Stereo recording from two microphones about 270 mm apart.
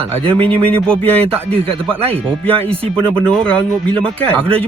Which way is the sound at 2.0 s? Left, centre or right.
Right.